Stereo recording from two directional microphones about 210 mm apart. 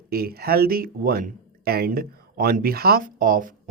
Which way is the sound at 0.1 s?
45° right (ahead or behind).